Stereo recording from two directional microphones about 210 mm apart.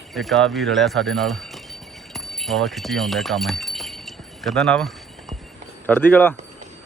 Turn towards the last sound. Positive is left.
turn(degrees=10)  # may be behind; listen again after turning